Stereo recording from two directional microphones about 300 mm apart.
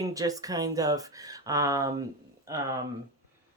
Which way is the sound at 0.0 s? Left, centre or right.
Centre.